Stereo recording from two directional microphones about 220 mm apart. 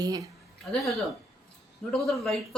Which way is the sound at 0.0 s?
15° right (ahead or behind).